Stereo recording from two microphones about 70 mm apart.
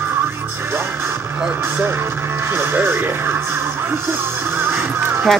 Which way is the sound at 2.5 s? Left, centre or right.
Right.